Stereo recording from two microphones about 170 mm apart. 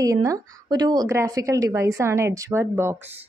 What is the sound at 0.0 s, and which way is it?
A woman's voice, 20° right (ahead or behind).